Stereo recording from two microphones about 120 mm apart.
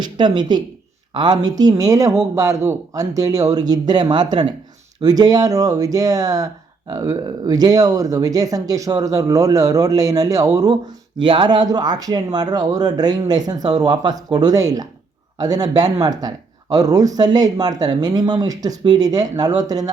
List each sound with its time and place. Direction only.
0.0 s speech: 40° right (ahead or behind)
11.2 s speech: 45° right (ahead or behind)